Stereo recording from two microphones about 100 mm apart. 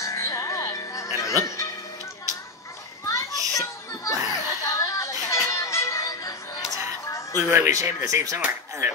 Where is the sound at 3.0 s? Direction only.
30° left (ahead or behind).